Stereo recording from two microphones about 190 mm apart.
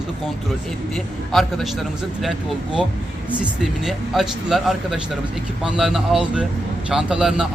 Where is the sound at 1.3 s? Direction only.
Centre (ahead or behind).